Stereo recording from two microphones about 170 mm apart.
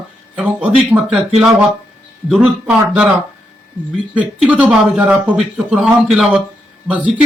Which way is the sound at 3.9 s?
10° right (ahead or behind).